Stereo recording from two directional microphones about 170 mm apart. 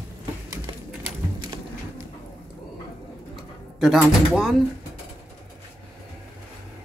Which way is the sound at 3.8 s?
5° right (ahead or behind).